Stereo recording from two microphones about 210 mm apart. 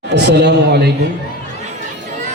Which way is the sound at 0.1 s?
55° right (ahead or behind).